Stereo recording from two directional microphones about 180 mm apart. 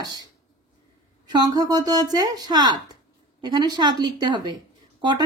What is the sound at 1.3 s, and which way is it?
Speech, 20° right (ahead or behind).